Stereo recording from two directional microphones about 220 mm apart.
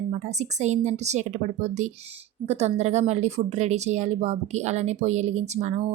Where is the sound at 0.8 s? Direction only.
30° right (ahead or behind).